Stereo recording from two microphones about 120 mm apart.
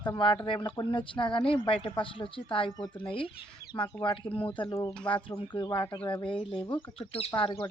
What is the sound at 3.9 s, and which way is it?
Speech, 5° left (ahead or behind).